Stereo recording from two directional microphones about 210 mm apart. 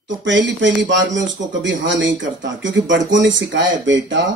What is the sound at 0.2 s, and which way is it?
Speech, 60° right (ahead or behind).